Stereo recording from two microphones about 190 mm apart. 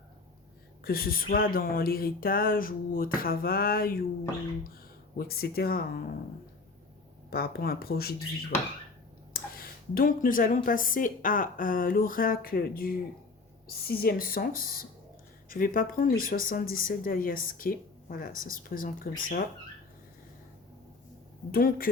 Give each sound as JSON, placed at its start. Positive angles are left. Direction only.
{"t": 0.9, "sound": "speech", "side_deg": 50}
{"t": 5.1, "sound": "speech", "side_deg": 50}
{"t": 7.3, "sound": "speech", "side_deg": 55}
{"t": 9.3, "sound": "speech", "side_deg": 50}
{"t": 21.5, "sound": "speech", "side_deg": 50}